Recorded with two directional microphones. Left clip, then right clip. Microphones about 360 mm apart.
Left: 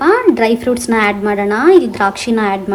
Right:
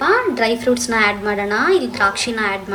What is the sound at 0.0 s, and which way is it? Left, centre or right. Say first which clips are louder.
A woman's voice: left 5 dB; centre.